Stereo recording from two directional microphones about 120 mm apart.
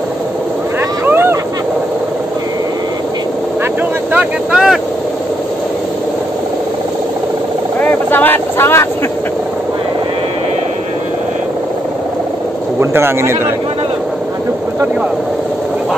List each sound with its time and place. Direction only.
1.0 s a sound: 20° right (ahead or behind)
4.1 s vehicle: 10° right (ahead or behind)
7.8 s vehicle: 15° left (ahead or behind)
12.9 s a man's voice: 20° right (ahead or behind)